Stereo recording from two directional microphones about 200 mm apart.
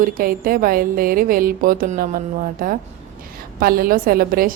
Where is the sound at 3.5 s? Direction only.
45° right (ahead or behind).